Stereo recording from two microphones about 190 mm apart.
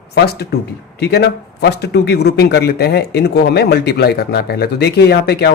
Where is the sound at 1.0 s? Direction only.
60° left (ahead or behind).